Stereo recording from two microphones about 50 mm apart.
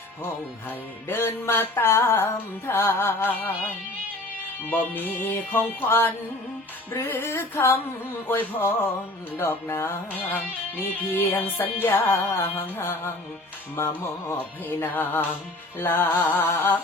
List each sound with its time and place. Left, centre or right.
1.0 s music: left
8.3 s music: left
10.1 s music: left
12.1 s music: left
16.2 s music: left